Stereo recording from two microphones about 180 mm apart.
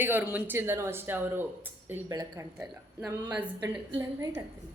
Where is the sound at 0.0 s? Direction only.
10° right (ahead or behind).